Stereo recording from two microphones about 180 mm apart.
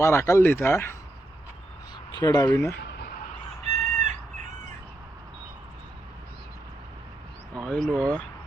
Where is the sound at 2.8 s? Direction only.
65° left (ahead or behind).